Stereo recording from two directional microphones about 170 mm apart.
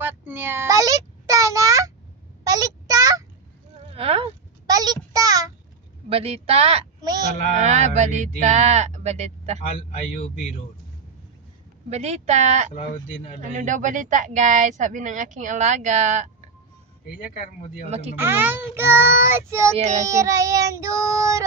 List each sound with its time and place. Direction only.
0.0 s a sound: 10° right (ahead or behind)
3.9 s a sound: 35° right (ahead or behind)
4.6 s child singing: 20° right (ahead or behind)
6.0 s speech: 35° right (ahead or behind)
9.6 s a man's voice: 45° left (ahead or behind)
11.9 s speech: 40° right (ahead or behind)
12.7 s a man's voice: 45° left (ahead or behind)
13.4 s speech: 50° right (ahead or behind)
17.8 s speech: 40° right (ahead or behind)
18.1 s child singing: 15° right (ahead or behind)
19.7 s speech: 35° right (ahead or behind)
20.1 s child singing: 20° right (ahead or behind)